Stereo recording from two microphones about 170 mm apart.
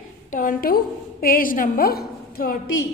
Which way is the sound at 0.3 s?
50° left (ahead or behind).